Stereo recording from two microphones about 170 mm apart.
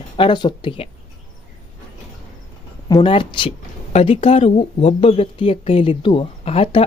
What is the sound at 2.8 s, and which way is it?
Speech, 25° left (ahead or behind).